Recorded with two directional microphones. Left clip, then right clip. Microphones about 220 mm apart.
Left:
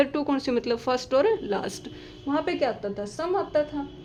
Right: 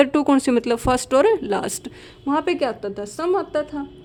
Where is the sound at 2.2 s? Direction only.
40° right (ahead or behind).